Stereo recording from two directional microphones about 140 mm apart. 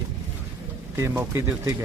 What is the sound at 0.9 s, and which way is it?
Speech, 20° right (ahead or behind).